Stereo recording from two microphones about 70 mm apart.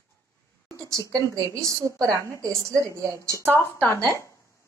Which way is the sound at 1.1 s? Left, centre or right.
Right.